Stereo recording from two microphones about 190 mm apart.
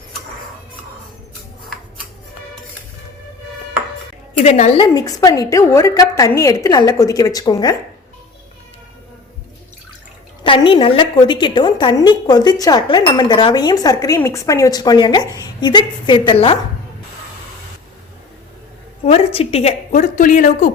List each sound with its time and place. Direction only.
4.4 s a woman's voice: 40° left (ahead or behind)
4.8 s a woman's voice: 20° left (ahead or behind)
10.4 s a woman's voice: 25° left (ahead or behind)
19.0 s a woman's voice: 30° left (ahead or behind)